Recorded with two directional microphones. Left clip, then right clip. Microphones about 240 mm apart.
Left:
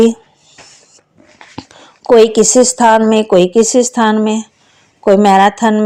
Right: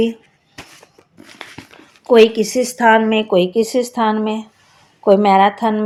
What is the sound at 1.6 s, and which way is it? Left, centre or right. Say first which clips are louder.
A woman's voice: left 7 dB; left.